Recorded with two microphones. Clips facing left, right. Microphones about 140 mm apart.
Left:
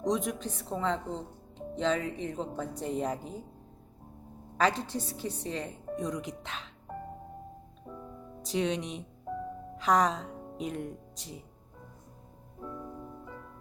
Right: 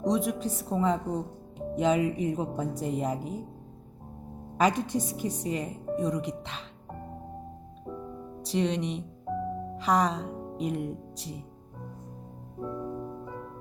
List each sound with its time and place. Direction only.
0.0 s speech: centre (ahead or behind)
4.5 s speech: 15° right (ahead or behind)
8.4 s speech: centre (ahead or behind)
12.6 s music: 25° right (ahead or behind)